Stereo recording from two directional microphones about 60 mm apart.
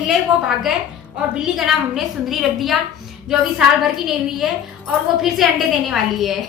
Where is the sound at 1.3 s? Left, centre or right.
Centre.